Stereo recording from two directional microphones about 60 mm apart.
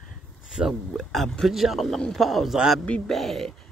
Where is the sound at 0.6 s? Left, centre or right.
Centre.